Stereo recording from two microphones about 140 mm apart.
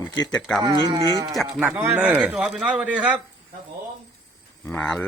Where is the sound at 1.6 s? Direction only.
15° right (ahead or behind).